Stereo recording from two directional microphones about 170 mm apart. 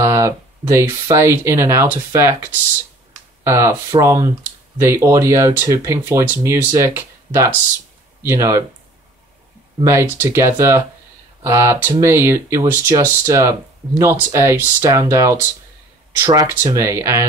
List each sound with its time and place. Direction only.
0.0 s speech: 20° right (ahead or behind)
9.8 s speech: 15° right (ahead or behind)